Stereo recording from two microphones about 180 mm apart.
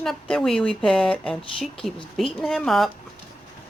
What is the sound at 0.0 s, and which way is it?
Speech, centre (ahead or behind).